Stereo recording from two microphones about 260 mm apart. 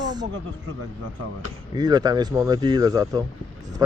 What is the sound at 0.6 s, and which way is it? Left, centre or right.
Speech, right.